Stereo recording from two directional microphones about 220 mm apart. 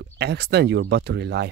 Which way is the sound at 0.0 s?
50° right (ahead or behind).